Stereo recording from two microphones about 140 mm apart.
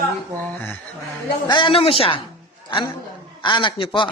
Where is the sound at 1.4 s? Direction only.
35° left (ahead or behind).